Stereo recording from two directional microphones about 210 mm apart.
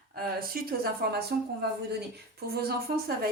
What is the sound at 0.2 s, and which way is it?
Speech, 45° right (ahead or behind).